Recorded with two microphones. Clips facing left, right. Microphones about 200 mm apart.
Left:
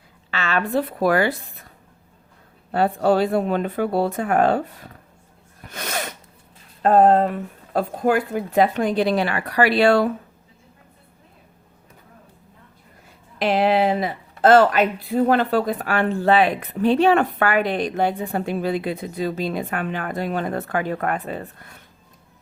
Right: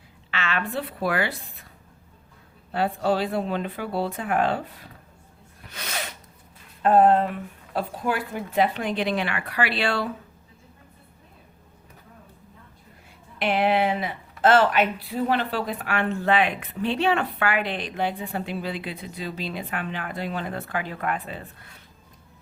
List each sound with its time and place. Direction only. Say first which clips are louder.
0.3 s a woman's voice: left 5 dB; 40° left (ahead or behind)
2.7 s speech: left 5 dB; 50° left (ahead or behind)
5.6 s sneeze: left 6 dB; 50° left (ahead or behind)
6.8 s speech: left 3 dB; 40° left (ahead or behind)
13.4 s speech: left 4 dB; 35° left (ahead or behind)